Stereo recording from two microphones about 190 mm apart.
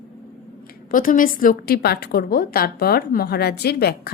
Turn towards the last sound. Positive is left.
turn(degrees=55)  # may be behind; listen again after turning